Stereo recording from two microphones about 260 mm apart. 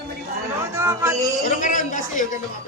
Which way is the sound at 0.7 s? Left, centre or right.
Centre.